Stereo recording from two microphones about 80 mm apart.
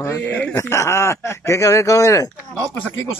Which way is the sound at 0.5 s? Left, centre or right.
Left.